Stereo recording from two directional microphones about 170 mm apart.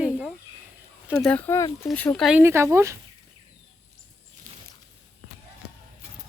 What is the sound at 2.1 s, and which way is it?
Speech, centre (ahead or behind).